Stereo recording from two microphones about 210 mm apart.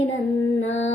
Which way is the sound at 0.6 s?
65° left (ahead or behind).